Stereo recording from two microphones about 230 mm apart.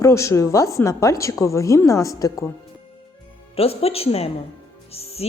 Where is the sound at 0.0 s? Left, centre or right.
Centre.